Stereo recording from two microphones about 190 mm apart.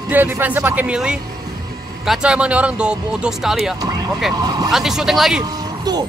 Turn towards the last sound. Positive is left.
turn(degrees=-20)  # may be behind; listen again after turning